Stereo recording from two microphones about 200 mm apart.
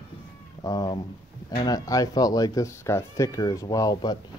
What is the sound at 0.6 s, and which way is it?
Speech, 20° left (ahead or behind).